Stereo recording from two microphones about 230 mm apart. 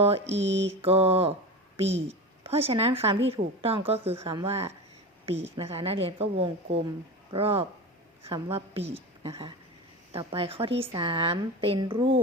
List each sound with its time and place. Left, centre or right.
0.3 s mantra: right
0.8 s a woman's voice: right
1.8 s mantra: right
2.4 s a woman's voice: right